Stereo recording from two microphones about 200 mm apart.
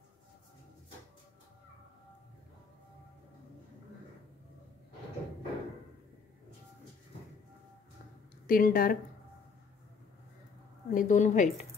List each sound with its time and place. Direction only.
8.5 s speech: 45° left (ahead or behind)
10.9 s a woman's voice: 40° left (ahead or behind)